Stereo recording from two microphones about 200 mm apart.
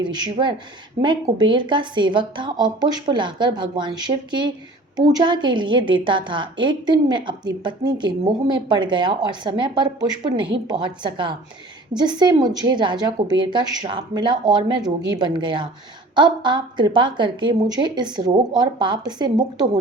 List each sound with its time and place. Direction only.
0.0 s a woman's voice: 25° right (ahead or behind)